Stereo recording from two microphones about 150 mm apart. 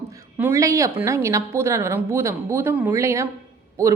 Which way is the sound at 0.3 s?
15° right (ahead or behind).